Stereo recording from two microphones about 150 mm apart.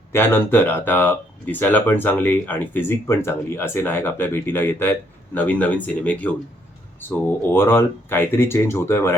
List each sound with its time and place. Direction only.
0.1 s speech: 15° left (ahead or behind)